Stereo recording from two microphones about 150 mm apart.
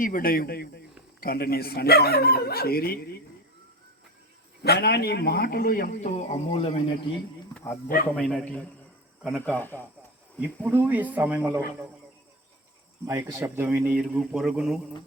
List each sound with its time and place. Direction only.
0.0 s speech: 70° left (ahead or behind); by 3.2 s 90° left
4.6 s a man's voice: 90° left; by 6.8 s 40° left (ahead or behind)
8.1 s a man's voice: 5° left (ahead or behind)
10.4 s a man's voice: 10° right (ahead or behind)
13.1 s a man's voice: 20° right (ahead or behind); by 14.8 s centre (ahead or behind)